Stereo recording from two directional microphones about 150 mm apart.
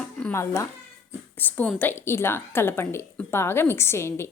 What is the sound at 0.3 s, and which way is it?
A woman's voice, 20° left (ahead or behind).